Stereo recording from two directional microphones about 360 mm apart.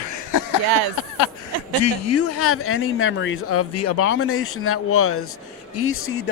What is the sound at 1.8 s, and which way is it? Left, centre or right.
Speech, left.